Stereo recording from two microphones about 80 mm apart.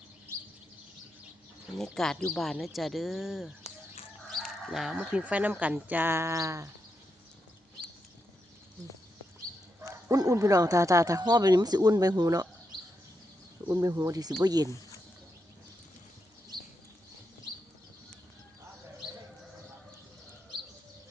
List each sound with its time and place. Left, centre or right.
1.7 s speech: centre; by 6.7 s right
10.2 s speech: right
13.8 s speech: right